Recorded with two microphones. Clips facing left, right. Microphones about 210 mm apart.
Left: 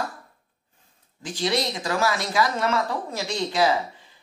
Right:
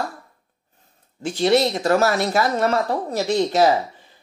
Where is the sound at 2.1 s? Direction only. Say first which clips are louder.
Right 4 dB; 60° right (ahead or behind).